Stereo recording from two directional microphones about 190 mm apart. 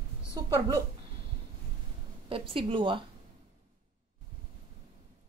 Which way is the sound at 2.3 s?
30° right (ahead or behind).